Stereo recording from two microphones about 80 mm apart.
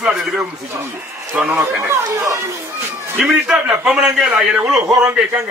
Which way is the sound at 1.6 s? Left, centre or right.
Right.